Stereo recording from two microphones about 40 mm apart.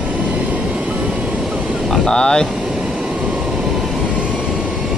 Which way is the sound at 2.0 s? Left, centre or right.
Left.